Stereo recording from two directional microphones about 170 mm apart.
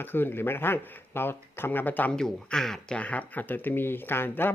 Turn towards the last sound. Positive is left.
turn(degrees=10)  # may be behind; listen again after turning